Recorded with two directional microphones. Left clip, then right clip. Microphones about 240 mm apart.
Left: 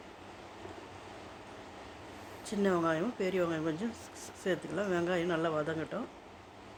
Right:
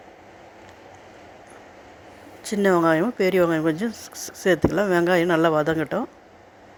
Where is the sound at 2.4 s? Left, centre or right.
Right.